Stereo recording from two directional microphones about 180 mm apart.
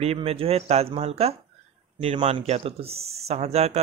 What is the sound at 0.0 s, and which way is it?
Speech, 35° right (ahead or behind).